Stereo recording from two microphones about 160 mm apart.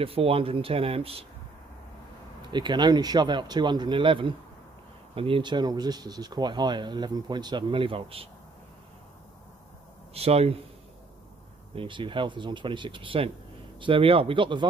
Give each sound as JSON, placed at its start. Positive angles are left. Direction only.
{"t": 0.0, "sound": "speech", "side_deg": -35}
{"t": 2.5, "sound": "speech", "side_deg": -30}
{"t": 10.1, "sound": "speech", "side_deg": -40}
{"t": 11.7, "sound": "speech", "side_deg": -30}